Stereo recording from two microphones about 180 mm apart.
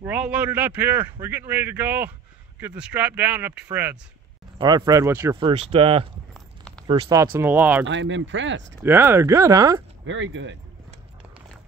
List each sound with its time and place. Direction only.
0.0 s speech: 5° right (ahead or behind)
4.6 s speech: 25° right (ahead or behind)
5.4 s speech: 30° right (ahead or behind)
7.3 s speech: 10° right (ahead or behind)
7.8 s speech: 90° right
8.8 s speech: 10° right (ahead or behind)
10.0 s speech: 90° right